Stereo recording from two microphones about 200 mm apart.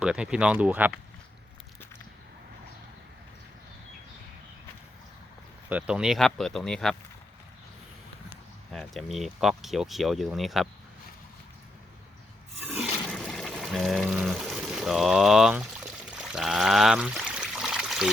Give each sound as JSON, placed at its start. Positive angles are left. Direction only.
{"t": 0.0, "sound": "speech", "side_deg": -5}
{"t": 5.6, "sound": "speech", "side_deg": -5}
{"t": 8.7, "sound": "speech", "side_deg": 0}
{"t": 12.6, "sound": "water", "side_deg": -5}
{"t": 16.0, "sound": "pour", "side_deg": -5}